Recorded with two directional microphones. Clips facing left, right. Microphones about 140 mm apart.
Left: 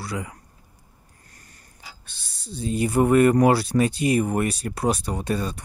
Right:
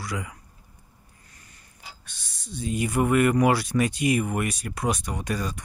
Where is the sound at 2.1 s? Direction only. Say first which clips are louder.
Left 3 dB; 30° left (ahead or behind).